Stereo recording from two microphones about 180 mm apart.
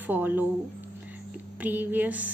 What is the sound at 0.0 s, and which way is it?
Speech, 10° right (ahead or behind).